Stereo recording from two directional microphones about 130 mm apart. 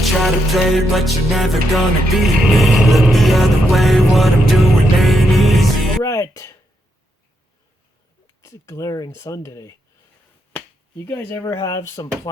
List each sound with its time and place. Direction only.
0.0 s music: centre (ahead or behind)
6.0 s speech: 25° left (ahead or behind)
8.4 s speech: 20° left (ahead or behind)
10.9 s speech: 20° left (ahead or behind)